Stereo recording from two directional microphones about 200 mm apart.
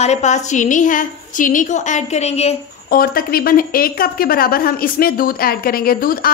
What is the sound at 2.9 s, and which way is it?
Speech, 45° left (ahead or behind).